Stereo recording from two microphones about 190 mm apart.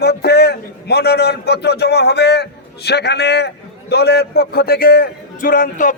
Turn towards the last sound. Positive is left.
turn(degrees=45)  # may be behind; listen again after turning